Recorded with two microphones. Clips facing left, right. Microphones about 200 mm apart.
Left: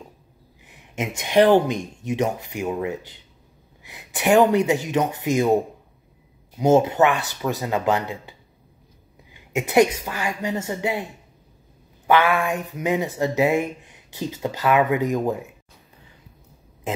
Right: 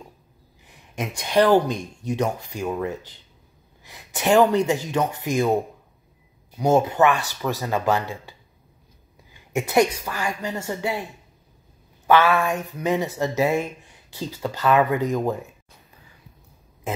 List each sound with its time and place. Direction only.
0.7 s a sound: 20° left (ahead or behind)
1.7 s speech: 20° left (ahead or behind)
6.6 s speech: 20° left (ahead or behind)